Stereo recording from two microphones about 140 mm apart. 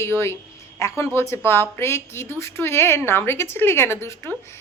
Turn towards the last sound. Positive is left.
turn(degrees=20)  # may be behind; listen again after turning